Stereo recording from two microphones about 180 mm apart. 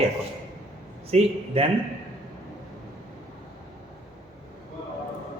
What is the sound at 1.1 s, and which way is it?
Speech, 35° right (ahead or behind).